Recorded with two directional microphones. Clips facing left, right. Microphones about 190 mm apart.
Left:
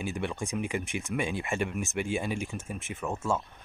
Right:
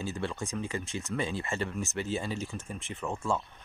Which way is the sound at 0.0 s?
15° left (ahead or behind).